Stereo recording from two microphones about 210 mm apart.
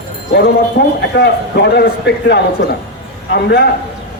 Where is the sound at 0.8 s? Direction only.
50° left (ahead or behind).